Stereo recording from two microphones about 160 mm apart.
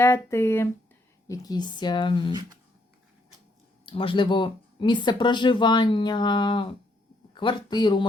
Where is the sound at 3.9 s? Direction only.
35° left (ahead or behind).